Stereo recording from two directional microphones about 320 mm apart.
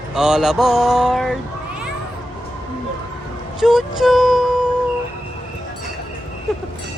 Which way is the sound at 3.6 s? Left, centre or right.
Centre.